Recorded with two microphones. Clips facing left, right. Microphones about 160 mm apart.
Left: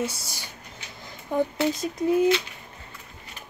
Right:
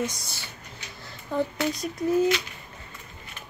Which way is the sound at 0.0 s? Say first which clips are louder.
Left 1 dB; 10° left (ahead or behind).